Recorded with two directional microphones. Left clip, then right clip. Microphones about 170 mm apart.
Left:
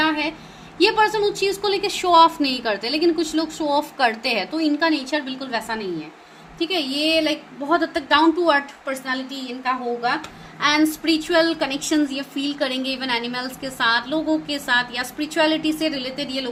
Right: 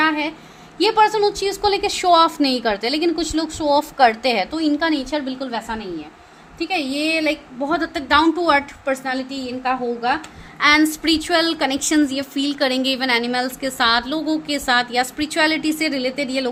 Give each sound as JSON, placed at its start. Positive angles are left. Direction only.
{"t": 0.0, "sound": "a sound", "side_deg": -50}
{"t": 0.8, "sound": "a woman's voice", "side_deg": -45}
{"t": 6.6, "sound": "a woman's voice", "side_deg": -65}
{"t": 10.6, "sound": "a woman's voice", "side_deg": -70}